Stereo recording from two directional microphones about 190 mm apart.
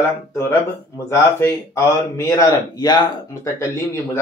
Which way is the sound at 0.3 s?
10° left (ahead or behind).